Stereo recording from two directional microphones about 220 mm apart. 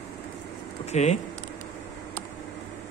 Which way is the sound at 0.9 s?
30° left (ahead or behind).